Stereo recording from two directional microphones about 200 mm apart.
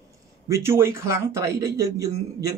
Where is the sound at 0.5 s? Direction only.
15° right (ahead or behind).